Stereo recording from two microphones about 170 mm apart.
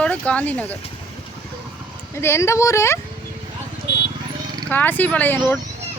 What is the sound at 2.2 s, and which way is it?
Speech, 15° left (ahead or behind).